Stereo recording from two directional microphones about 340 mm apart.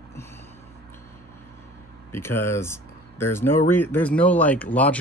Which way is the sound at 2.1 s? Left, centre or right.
Centre.